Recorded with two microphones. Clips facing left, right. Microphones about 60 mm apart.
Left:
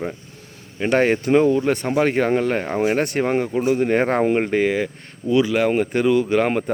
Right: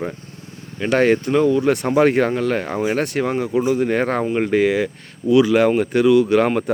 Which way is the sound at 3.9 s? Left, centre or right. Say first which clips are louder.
Left 1 dB; centre.